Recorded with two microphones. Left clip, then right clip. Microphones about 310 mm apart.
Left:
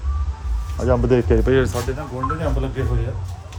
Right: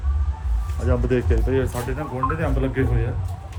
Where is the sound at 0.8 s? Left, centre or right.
Centre.